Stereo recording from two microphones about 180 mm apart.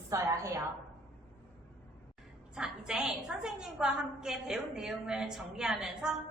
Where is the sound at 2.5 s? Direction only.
5° right (ahead or behind).